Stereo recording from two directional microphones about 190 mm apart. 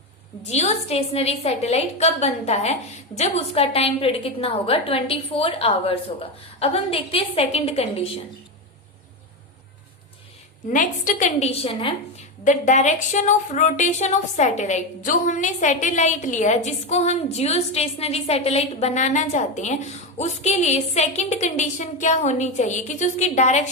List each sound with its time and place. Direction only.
0.4 s a woman's voice: 35° left (ahead or behind)
10.7 s a woman's voice: 45° left (ahead or behind)
12.5 s a woman's voice: 40° left (ahead or behind)